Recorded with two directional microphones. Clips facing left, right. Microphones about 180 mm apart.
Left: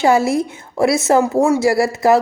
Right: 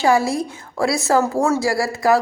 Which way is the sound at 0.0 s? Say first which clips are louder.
Left 3 dB; 25° left (ahead or behind).